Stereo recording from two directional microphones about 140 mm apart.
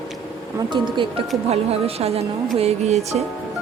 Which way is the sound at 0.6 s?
35° right (ahead or behind).